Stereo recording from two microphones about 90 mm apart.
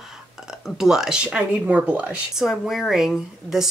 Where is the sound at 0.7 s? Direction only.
5° right (ahead or behind).